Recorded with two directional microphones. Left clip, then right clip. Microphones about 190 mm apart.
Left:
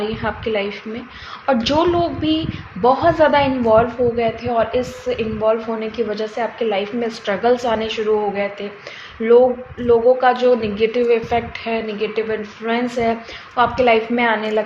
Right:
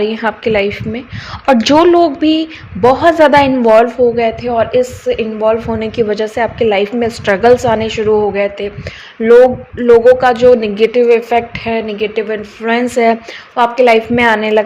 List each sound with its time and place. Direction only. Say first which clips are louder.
0.0 s a woman's voice: right 8 dB; 45° right (ahead or behind)
9.7 s a woman's voice: right 8 dB; 50° right (ahead or behind)